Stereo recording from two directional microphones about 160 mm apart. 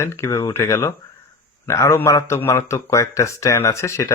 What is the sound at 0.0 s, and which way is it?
A man's voice, 15° left (ahead or behind).